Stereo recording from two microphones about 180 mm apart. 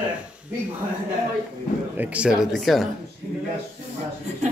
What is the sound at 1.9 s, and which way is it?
Speech, 10° right (ahead or behind).